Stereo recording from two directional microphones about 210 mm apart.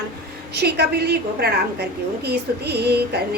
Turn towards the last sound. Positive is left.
turn(degrees=-50)  # may be behind; listen again after turning